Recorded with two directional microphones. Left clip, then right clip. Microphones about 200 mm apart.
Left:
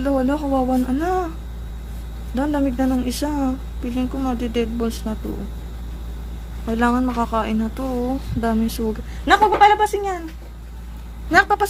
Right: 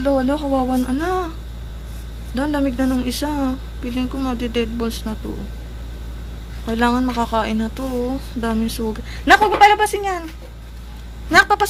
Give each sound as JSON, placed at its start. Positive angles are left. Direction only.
{"t": 0.0, "sound": "a woman's voice", "side_deg": 5}
{"t": 2.3, "sound": "a woman's voice", "side_deg": 5}
{"t": 6.7, "sound": "a woman's voice", "side_deg": 5}
{"t": 9.2, "sound": "speech", "side_deg": -15}
{"t": 11.3, "sound": "a woman's voice", "side_deg": 0}